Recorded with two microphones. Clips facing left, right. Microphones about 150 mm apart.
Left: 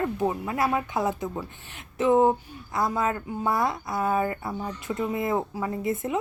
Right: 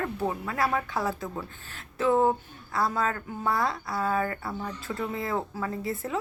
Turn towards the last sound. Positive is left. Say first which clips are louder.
# left 4 dB
turn(degrees=20)  # may be behind; listen again after turning